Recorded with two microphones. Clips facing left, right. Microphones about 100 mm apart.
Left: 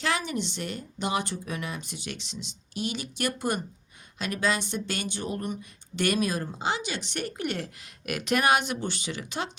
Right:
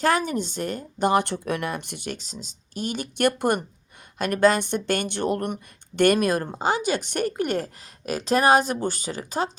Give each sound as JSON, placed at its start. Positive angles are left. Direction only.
{"t": 0.0, "sound": "speech", "side_deg": -45}